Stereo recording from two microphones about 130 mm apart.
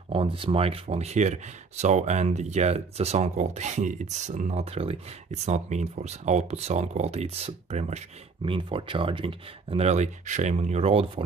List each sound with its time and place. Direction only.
0.1 s speech: 45° right (ahead or behind)
8.5 s speech: 40° right (ahead or behind)